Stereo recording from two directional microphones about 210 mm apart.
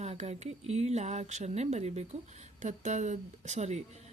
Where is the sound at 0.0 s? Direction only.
30° right (ahead or behind).